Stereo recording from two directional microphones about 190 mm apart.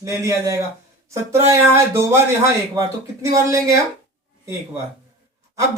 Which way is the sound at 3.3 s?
15° right (ahead or behind).